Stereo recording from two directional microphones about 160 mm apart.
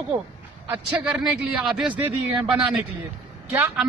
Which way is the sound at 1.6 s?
5° right (ahead or behind).